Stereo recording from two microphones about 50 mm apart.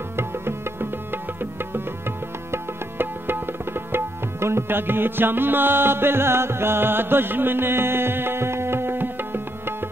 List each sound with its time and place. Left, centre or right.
0.1 s music: right